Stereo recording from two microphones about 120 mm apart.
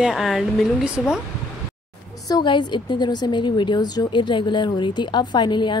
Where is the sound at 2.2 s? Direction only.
40° left (ahead or behind).